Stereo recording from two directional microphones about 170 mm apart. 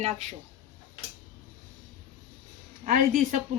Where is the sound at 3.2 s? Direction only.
50° right (ahead or behind).